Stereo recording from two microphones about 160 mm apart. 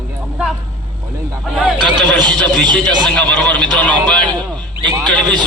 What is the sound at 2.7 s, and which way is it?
Speech, 25° right (ahead or behind).